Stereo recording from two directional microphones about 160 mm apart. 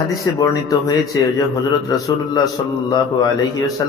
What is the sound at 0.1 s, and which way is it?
A man's voice, 20° left (ahead or behind).